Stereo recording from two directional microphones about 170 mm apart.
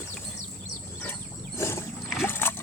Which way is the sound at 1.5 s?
15° left (ahead or behind).